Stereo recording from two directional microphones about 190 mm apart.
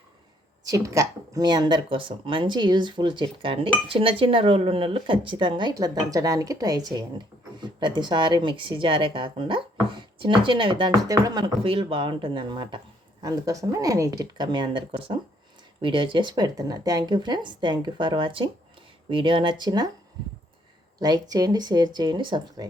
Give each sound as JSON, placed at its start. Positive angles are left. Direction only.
{"t": 0.6, "sound": "speech", "side_deg": -20}
{"t": 21.0, "sound": "speech", "side_deg": -20}